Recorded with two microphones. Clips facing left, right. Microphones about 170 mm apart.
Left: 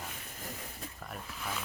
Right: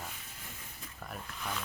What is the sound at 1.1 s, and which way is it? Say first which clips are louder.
Speech: right 1 dB; centre (ahead or behind).